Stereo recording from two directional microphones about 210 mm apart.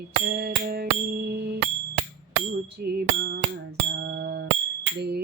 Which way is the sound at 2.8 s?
50° right (ahead or behind).